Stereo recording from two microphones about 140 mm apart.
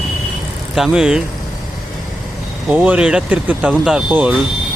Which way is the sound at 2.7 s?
10° right (ahead or behind).